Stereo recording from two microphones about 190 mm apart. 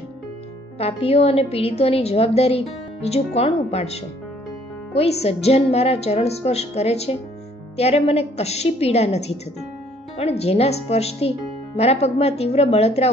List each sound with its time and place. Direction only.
0.7 s a woman's voice: 35° left (ahead or behind)